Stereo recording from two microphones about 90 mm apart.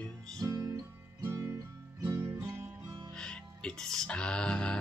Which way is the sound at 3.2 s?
10° left (ahead or behind).